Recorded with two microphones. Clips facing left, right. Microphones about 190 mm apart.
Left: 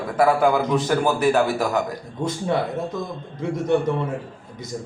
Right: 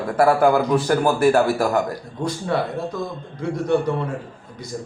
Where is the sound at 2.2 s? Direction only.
20° left (ahead or behind).